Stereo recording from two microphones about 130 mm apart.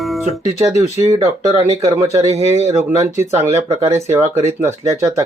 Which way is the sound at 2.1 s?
55° right (ahead or behind).